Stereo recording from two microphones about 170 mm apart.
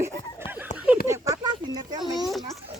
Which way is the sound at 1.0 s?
15° right (ahead or behind).